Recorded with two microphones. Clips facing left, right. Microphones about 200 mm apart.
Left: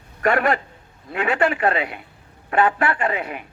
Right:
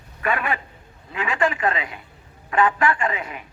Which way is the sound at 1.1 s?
40° left (ahead or behind).